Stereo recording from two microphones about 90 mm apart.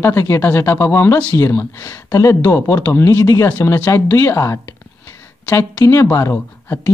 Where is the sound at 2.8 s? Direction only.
25° left (ahead or behind).